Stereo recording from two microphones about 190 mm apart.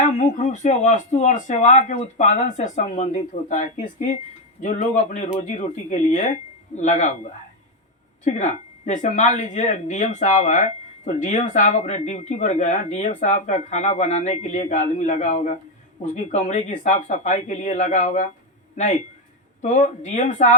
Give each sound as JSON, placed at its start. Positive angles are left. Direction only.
{"t": 0.0, "sound": "speech", "side_deg": 40}